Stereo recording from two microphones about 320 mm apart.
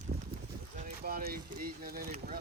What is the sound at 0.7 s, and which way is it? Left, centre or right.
Speech, right.